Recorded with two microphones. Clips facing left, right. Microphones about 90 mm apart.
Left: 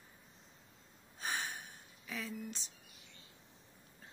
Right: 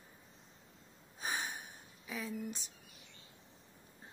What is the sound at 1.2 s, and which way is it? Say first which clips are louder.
Gasp: right 1 dB; 10° right (ahead or behind).